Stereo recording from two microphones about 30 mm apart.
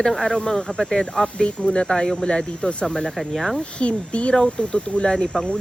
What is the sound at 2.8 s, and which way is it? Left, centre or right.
Speech, centre.